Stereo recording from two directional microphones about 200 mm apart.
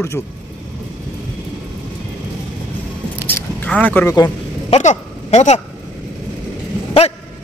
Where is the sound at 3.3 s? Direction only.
10° left (ahead or behind).